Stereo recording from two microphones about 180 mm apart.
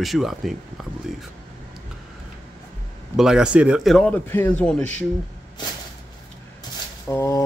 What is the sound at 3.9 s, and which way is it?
Speech, 10° left (ahead or behind).